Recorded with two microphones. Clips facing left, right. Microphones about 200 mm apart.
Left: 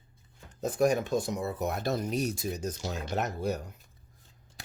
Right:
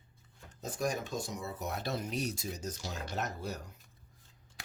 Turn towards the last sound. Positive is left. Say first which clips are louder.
# left 7 dB
turn(degrees=60)  # may be behind; listen again after turning